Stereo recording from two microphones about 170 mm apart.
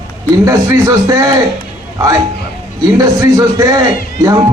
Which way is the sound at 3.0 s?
20° right (ahead or behind).